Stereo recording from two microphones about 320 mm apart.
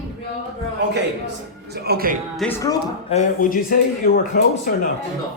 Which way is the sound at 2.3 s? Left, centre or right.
Centre.